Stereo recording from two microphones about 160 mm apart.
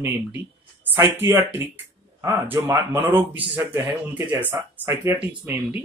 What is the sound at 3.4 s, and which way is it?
Speech, 35° right (ahead or behind).